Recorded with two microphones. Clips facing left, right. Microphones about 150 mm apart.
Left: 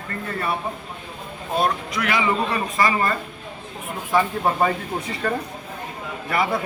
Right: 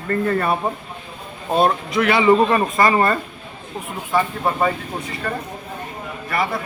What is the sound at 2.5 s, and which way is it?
Speech, 50° right (ahead or behind).